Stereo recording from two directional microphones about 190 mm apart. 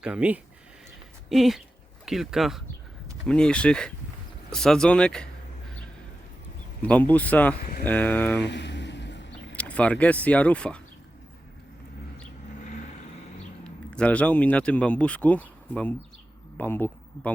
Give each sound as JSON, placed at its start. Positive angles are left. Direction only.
{"t": 0.0, "sound": "speech", "side_deg": -5}
{"t": 6.8, "sound": "speech", "side_deg": 10}
{"t": 8.4, "sound": "vehicle", "side_deg": 65}
{"t": 9.5, "sound": "speech", "side_deg": 5}
{"t": 13.7, "sound": "speech", "side_deg": 5}